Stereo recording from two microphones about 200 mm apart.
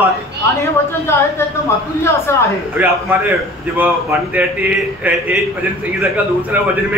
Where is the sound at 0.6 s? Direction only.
15° left (ahead or behind).